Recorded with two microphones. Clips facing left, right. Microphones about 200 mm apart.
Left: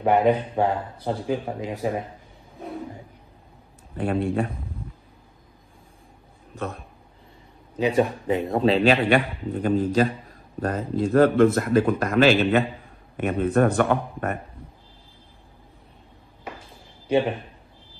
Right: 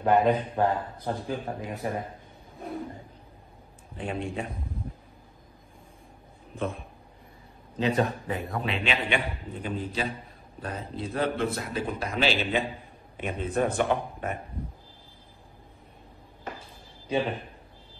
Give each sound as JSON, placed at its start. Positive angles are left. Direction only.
{"t": 0.0, "sound": "speech", "side_deg": 15}
{"t": 4.0, "sound": "speech", "side_deg": 60}
{"t": 7.8, "sound": "a man's voice", "side_deg": 15}
{"t": 8.9, "sound": "speech", "side_deg": 60}